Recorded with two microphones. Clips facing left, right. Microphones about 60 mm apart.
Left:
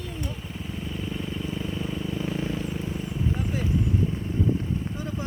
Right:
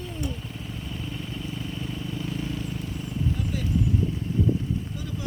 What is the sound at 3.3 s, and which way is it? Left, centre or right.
Clip-clop, left.